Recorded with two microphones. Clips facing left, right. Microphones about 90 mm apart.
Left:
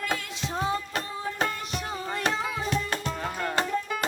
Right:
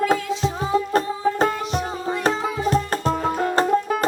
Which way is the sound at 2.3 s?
40° right (ahead or behind).